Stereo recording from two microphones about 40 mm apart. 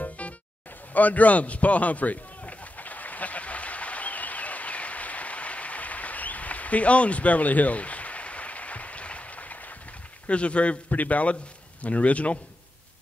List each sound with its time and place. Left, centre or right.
0.2 s music: left
0.9 s a sound: left
10.2 s a man's voice: left